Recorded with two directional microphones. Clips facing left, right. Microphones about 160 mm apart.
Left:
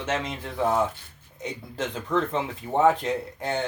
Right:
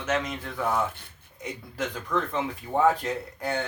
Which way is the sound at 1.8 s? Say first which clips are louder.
Left 3 dB; 25° left (ahead or behind).